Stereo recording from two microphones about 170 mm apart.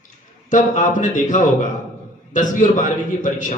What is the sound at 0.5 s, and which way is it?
A man's voice, 50° left (ahead or behind).